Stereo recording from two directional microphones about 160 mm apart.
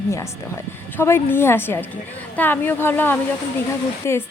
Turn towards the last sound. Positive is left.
turn(degrees=15)  # may be behind; listen again after turning